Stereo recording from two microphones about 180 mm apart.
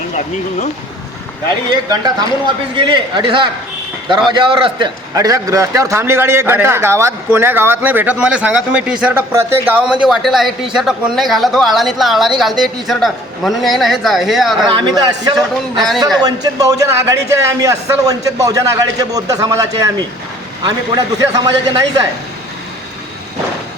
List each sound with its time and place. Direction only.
2.7 s a man's voice: 25° right (ahead or behind); by 14.7 s centre (ahead or behind)
14.7 s a man's voice: 25° right (ahead or behind)